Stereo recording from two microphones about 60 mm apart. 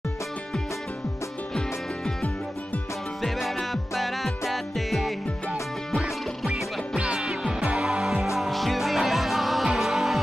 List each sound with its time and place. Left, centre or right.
3.2 s music: centre